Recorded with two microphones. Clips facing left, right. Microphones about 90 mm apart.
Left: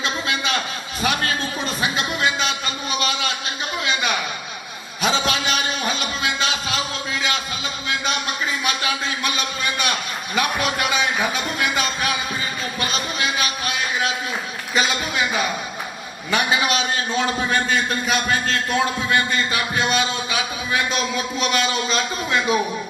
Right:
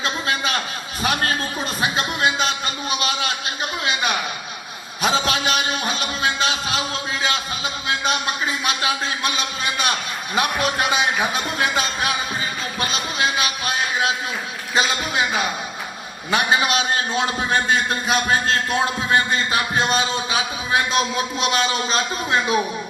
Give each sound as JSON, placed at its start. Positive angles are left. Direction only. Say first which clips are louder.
{"t": 0.0, "sound": "a sound", "louder": "right 1 dB", "side_deg": -40}
{"t": 3.1, "sound": "a man's voice", "louder": "even", "side_deg": -35}
{"t": 5.0, "sound": "a sound", "louder": "right 1 dB", "side_deg": -35}
{"t": 9.3, "sound": "a man's voice", "louder": "even", "side_deg": 45}
{"t": 10.3, "sound": "a man's voice", "louder": "right 1 dB", "side_deg": -40}
{"t": 16.3, "sound": "a man's voice", "louder": "right 1 dB", "side_deg": -35}